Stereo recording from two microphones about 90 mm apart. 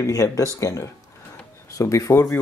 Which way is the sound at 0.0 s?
40° left (ahead or behind).